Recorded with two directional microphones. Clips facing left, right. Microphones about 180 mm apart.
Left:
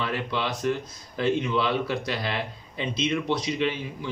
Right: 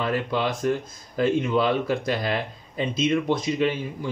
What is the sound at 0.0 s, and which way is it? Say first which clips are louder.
Speech: right 4 dB; 45° right (ahead or behind).